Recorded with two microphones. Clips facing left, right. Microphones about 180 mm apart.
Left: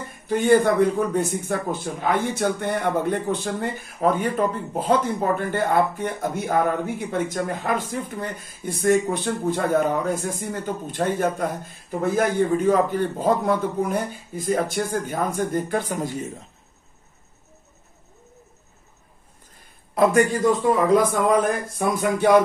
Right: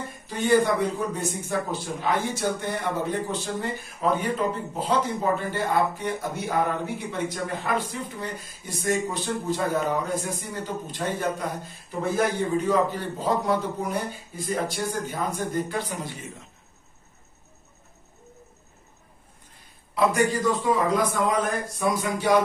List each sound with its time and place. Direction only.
0.3 s a man's voice: 55° left (ahead or behind)
19.9 s a man's voice: 50° left (ahead or behind)